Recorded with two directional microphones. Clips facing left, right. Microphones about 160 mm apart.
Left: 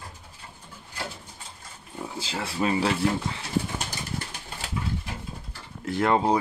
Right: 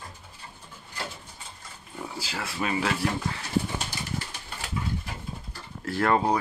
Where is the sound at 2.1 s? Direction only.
25° left (ahead or behind).